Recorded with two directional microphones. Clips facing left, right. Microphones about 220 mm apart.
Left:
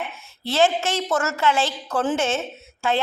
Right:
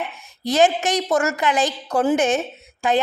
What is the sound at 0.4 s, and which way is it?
Speech, 15° right (ahead or behind).